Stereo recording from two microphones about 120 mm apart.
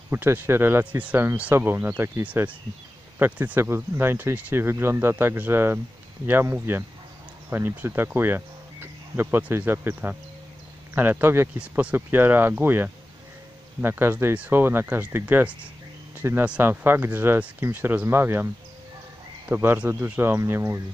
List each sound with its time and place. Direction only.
0.1 s speech: 20° right (ahead or behind)
19.5 s speech: 15° right (ahead or behind)